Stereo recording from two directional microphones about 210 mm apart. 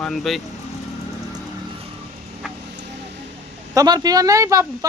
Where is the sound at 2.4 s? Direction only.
Centre (ahead or behind).